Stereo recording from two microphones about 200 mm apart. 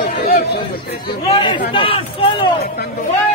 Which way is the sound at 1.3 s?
25° left (ahead or behind).